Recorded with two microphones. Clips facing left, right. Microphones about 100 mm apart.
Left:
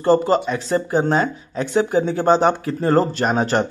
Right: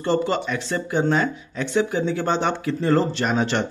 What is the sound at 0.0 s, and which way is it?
Speech, 40° left (ahead or behind).